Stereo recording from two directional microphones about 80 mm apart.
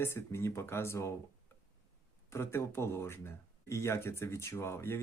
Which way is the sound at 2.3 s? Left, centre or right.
Left.